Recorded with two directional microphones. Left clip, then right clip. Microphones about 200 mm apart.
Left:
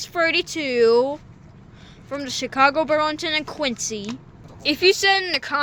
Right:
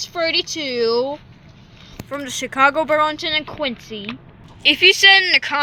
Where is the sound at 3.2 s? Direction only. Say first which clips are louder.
Right 2 dB; 15° left (ahead or behind).